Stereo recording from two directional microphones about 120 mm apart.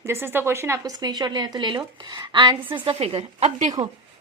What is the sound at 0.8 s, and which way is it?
A woman's voice, 35° right (ahead or behind).